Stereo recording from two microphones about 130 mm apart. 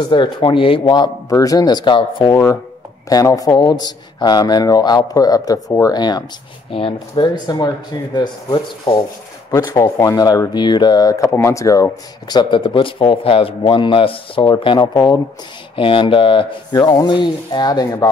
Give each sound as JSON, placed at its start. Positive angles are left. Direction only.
{"t": 0.0, "sound": "speech", "side_deg": 40}